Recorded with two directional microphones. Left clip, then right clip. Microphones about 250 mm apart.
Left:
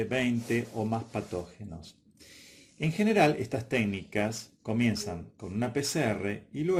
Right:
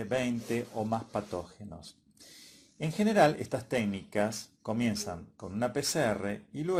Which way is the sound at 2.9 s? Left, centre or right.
Centre.